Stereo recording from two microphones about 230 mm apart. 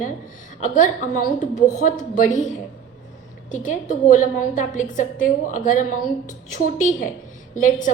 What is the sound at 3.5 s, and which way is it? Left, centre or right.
A woman's voice, left.